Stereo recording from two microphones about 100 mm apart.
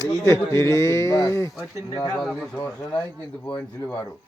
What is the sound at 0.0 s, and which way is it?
Speech, 25° left (ahead or behind).